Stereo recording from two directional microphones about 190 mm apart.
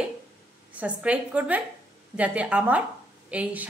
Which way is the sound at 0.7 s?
5° right (ahead or behind).